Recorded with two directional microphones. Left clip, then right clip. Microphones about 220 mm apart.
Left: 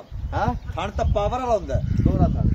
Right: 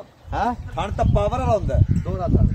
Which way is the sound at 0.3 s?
40° right (ahead or behind).